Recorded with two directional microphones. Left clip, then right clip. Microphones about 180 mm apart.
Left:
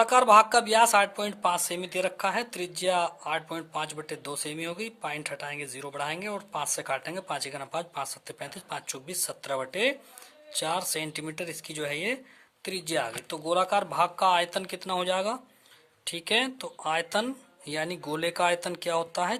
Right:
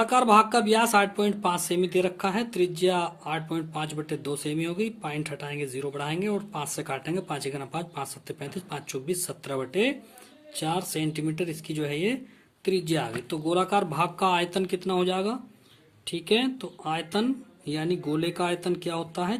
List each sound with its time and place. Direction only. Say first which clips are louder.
0.0 s speech: left 1 dB; 35° left (ahead or behind)